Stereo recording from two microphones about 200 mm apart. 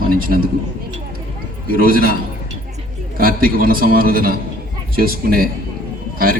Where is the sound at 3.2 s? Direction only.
45° right (ahead or behind).